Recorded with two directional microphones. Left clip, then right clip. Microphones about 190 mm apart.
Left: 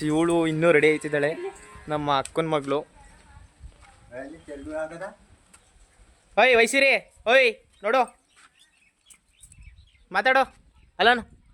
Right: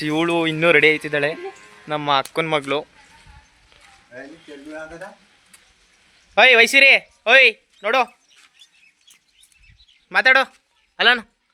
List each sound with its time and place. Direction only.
0.0 s speech: centre (ahead or behind)
4.7 s speech: 15° right (ahead or behind)
6.3 s speech: centre (ahead or behind)
10.1 s speech: 5° left (ahead or behind)